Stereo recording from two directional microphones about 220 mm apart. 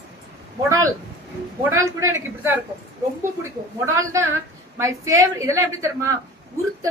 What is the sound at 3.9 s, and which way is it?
A woman's voice, 15° right (ahead or behind).